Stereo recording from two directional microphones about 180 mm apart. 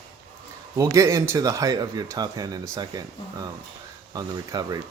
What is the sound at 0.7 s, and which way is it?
Speech, 15° right (ahead or behind).